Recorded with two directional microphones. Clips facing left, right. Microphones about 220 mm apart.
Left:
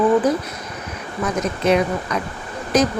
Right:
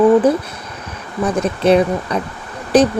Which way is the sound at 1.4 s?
30° right (ahead or behind).